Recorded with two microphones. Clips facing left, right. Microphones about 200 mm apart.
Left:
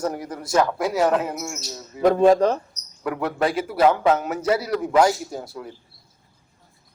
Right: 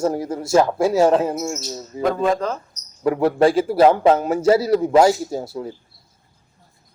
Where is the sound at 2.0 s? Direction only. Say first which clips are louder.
Left 4 dB; 35° left (ahead or behind).